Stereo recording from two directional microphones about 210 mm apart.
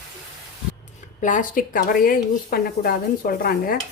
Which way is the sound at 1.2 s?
40° left (ahead or behind).